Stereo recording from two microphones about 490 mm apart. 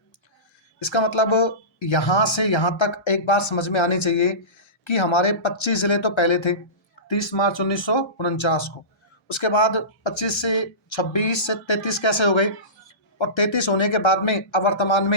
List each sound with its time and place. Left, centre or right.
0.8 s speech: left